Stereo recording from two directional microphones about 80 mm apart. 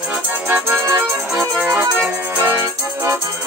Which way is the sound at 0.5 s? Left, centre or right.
Right.